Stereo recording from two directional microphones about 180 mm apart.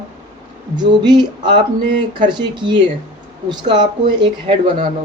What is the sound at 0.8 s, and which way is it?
Speech, 25° right (ahead or behind).